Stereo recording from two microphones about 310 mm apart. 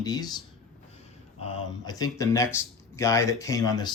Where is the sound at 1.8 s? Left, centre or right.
Centre.